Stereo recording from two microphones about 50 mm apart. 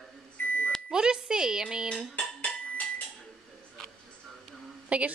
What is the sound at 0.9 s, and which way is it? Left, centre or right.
Speech, centre.